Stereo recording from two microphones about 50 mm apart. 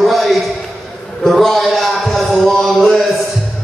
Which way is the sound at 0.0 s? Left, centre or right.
Centre.